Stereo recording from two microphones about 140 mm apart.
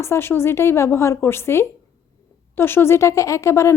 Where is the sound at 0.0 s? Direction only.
20° left (ahead or behind).